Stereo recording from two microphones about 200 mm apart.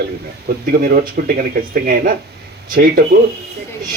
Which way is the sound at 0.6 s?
45° right (ahead or behind).